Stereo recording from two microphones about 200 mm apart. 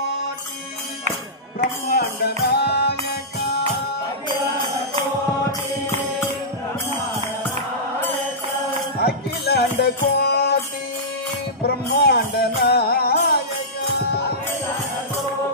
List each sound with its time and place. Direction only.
1.9 s music: 50° left (ahead or behind)
4.3 s mantra: 25° right (ahead or behind)
9.0 s music: 55° left (ahead or behind)
11.6 s music: 50° left (ahead or behind)